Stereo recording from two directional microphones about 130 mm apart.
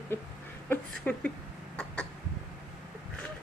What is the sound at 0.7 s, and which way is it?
Speech, 10° left (ahead or behind).